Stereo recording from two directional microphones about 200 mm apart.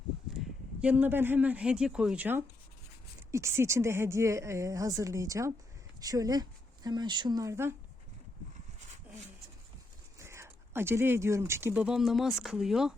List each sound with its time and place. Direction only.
0.3 s a woman's voice: 5° right (ahead or behind)
10.2 s speech: 15° right (ahead or behind)